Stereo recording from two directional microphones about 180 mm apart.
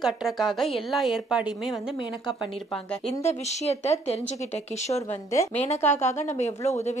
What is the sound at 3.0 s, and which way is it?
A woman's voice, 35° left (ahead or behind).